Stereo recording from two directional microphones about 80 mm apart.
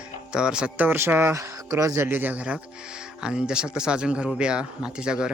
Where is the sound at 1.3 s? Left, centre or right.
Right.